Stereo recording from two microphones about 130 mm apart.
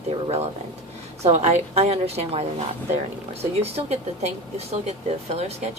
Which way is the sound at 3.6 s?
55° right (ahead or behind).